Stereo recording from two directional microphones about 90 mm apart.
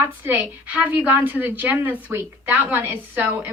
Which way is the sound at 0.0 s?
20° right (ahead or behind).